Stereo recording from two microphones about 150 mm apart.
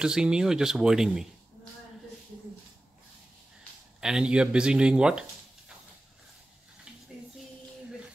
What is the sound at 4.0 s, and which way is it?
A man's voice, 5° right (ahead or behind).